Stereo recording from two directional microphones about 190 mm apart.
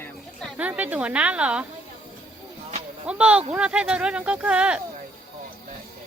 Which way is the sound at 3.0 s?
5° right (ahead or behind).